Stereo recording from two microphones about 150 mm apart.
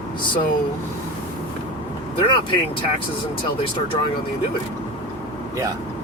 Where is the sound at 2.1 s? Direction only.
35° left (ahead or behind).